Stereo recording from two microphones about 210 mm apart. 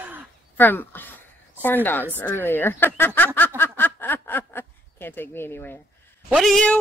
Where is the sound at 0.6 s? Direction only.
10° left (ahead or behind).